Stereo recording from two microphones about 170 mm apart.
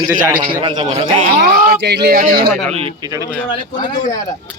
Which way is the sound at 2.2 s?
60° right (ahead or behind).